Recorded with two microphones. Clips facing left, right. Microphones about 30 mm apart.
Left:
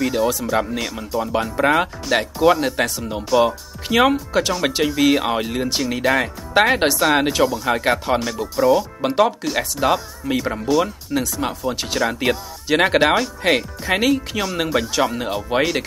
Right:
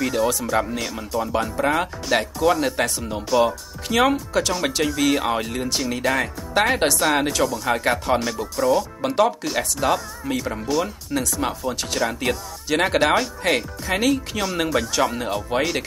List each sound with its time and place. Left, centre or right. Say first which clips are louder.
0.0 s speech: left 2 dB; centre
1.6 s speech: left 7 dB; left
2.6 s speech: left 1 dB; centre
10.6 s speech: left 4 dB; centre
13.4 s speech: left 3 dB; centre
13.8 s speech: left 3 dB; centre
14.1 s speech: left 2 dB; centre